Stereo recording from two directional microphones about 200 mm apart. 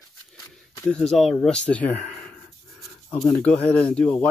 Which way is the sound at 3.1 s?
5° left (ahead or behind).